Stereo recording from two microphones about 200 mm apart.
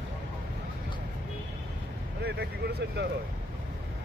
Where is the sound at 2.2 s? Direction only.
55° right (ahead or behind).